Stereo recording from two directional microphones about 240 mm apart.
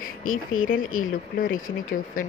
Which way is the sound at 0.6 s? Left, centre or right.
Left.